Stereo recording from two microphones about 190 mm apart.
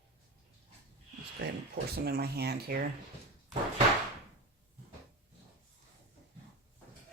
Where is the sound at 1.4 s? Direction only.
65° right (ahead or behind).